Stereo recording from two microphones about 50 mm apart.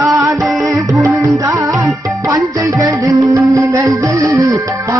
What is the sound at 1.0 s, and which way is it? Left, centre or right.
Music, right.